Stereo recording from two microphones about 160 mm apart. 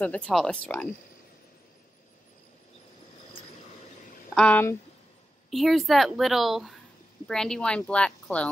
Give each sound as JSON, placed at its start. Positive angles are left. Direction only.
{"t": 0.0, "sound": "speech", "side_deg": 10}
{"t": 4.4, "sound": "speech", "side_deg": 10}
{"t": 5.5, "sound": "a woman's voice", "side_deg": 0}